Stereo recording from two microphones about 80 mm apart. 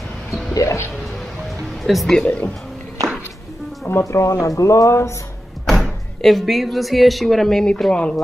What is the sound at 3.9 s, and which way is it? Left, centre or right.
Speech, left.